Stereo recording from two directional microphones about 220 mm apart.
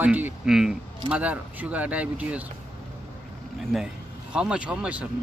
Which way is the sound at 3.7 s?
5° right (ahead or behind).